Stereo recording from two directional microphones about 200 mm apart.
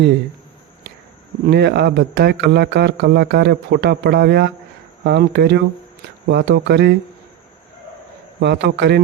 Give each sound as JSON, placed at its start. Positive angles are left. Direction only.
{"t": 1.5, "sound": "speech", "side_deg": -55}
{"t": 8.4, "sound": "speech", "side_deg": -60}